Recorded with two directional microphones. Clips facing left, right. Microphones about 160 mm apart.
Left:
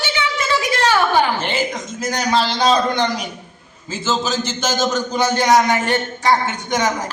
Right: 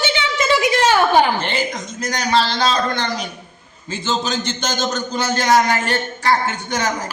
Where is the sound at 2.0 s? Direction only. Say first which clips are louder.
Even; 10° left (ahead or behind).